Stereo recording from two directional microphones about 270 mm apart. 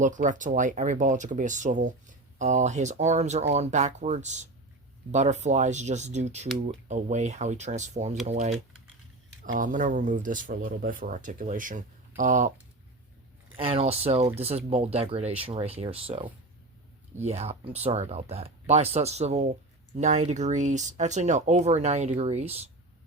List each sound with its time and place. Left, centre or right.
0.0 s speech: right
13.6 s speech: right